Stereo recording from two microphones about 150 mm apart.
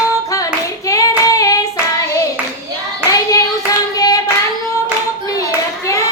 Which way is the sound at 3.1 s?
25° left (ahead or behind).